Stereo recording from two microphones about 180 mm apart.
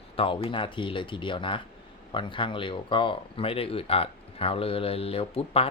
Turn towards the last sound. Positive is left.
turn(degrees=30)  # may be behind; listen again after turning